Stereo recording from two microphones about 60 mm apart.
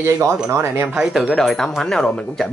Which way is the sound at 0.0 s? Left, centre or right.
Right.